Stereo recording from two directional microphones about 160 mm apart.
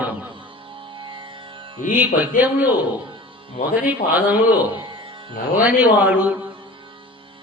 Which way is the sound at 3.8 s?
10° right (ahead or behind).